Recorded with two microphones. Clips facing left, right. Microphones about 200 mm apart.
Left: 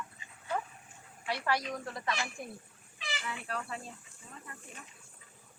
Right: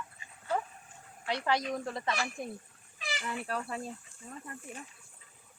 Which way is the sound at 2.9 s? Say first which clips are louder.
Right 3 dB; 40° right (ahead or behind).